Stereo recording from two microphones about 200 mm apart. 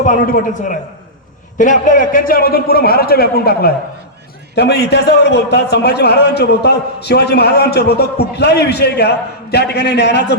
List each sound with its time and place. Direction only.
0.0 s a man's voice: 40° left (ahead or behind); by 10.3 s 55° left (ahead or behind)